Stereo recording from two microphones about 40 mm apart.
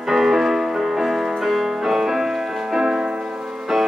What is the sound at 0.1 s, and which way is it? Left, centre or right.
Music, centre.